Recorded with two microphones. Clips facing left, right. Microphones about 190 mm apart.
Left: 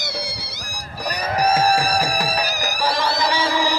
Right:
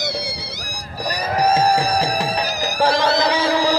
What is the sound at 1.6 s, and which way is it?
Music, 20° right (ahead or behind).